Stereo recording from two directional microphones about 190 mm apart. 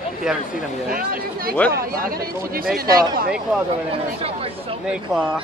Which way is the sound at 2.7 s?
50° right (ahead or behind).